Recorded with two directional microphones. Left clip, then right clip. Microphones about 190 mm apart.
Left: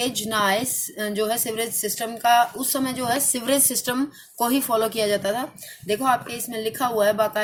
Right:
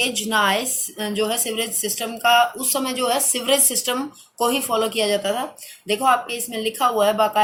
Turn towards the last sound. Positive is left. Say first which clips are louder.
# right 3 dB
turn(degrees=50)  # may be behind; listen again after turning